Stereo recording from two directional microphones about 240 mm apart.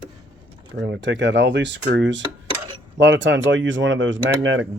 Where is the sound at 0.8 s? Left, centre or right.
Right.